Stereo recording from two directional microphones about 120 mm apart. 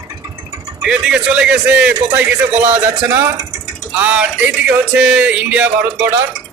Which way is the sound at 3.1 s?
25° right (ahead or behind).